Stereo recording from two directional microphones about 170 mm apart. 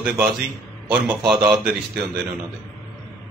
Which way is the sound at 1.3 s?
5° right (ahead or behind).